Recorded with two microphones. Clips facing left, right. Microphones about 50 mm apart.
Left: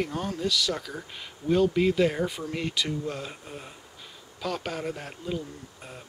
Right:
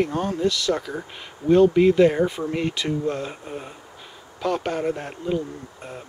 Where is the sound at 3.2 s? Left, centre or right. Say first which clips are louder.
Right 7 dB; centre.